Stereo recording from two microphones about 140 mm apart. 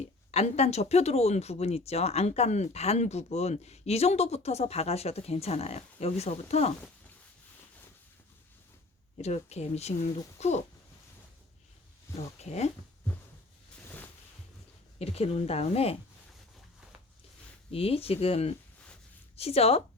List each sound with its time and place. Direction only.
0.0 s speech: 50° left (ahead or behind)
9.1 s speech: 50° left (ahead or behind)
12.4 s speech: 50° left (ahead or behind)
14.9 s speech: 45° left (ahead or behind)
17.7 s speech: 45° left (ahead or behind)